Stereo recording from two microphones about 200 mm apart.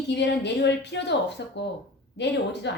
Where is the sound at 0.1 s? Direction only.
60° left (ahead or behind).